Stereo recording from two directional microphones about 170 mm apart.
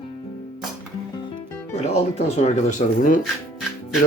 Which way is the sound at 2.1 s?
40° left (ahead or behind).